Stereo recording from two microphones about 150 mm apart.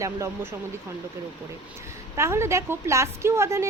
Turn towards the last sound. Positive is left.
turn(degrees=-20)  # may be behind; listen again after turning